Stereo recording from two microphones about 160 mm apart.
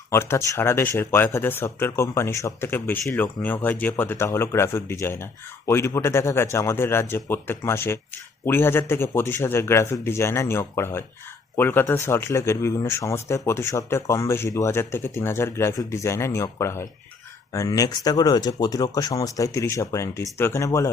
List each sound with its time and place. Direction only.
0.1 s speech: 15° left (ahead or behind)